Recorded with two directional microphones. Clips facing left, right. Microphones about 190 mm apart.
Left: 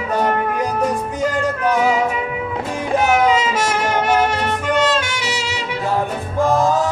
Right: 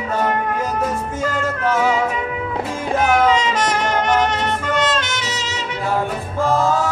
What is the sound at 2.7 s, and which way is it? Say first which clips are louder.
Music: left 1 dB; 10° left (ahead or behind).